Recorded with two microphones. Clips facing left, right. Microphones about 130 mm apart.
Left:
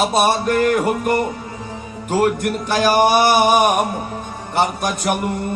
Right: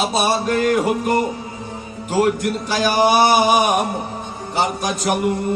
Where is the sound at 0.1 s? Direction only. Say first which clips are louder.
Left 2 dB; 55° left (ahead or behind).